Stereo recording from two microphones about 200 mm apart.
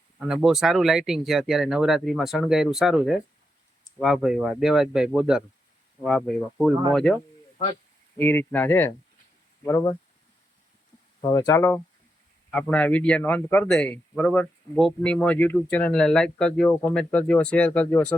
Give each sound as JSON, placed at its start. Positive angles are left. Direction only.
{"t": 0.2, "sound": "speech", "side_deg": -5}
{"t": 8.2, "sound": "speech", "side_deg": 10}
{"t": 11.2, "sound": "speech", "side_deg": 15}